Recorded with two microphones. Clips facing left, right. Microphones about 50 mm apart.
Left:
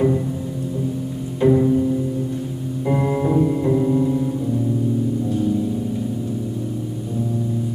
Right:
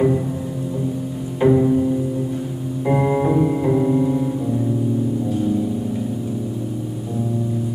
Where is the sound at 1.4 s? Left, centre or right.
Centre.